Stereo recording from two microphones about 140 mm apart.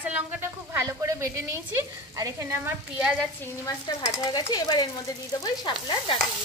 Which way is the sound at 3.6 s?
25° left (ahead or behind).